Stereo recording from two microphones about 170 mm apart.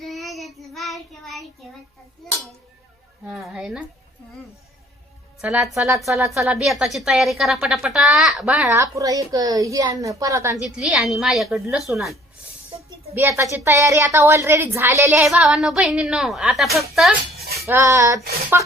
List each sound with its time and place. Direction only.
0.0 s child singing: centre (ahead or behind)
3.2 s a woman's voice: centre (ahead or behind)
5.4 s a woman's voice: 5° right (ahead or behind)
6.5 s a woman's voice: 5° right (ahead or behind)
8.8 s a woman's voice: 20° right (ahead or behind); by 12.1 s centre (ahead or behind)
13.1 s a woman's voice: 15° right (ahead or behind)
15.3 s a woman's voice: 5° right (ahead or behind)
17.7 s a woman's voice: 15° right (ahead or behind)